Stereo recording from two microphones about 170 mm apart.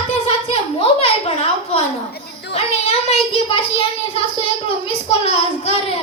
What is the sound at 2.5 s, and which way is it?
A child's voice, 35° left (ahead or behind).